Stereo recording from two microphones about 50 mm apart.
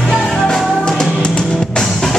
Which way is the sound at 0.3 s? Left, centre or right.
Centre.